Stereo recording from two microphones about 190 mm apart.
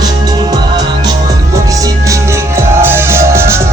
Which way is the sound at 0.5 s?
20° right (ahead or behind).